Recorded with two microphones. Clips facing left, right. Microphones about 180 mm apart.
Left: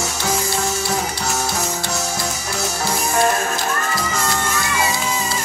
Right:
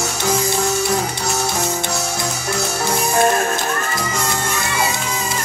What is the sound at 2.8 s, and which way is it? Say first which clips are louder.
Music: right 2 dB; 20° right (ahead or behind).